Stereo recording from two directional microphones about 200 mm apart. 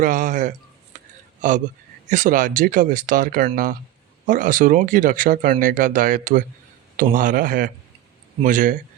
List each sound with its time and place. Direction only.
0.0 s speech: 40° right (ahead or behind)